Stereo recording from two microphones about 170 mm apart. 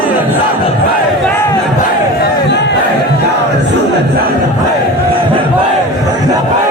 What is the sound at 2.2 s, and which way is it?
Crowd, 85° left.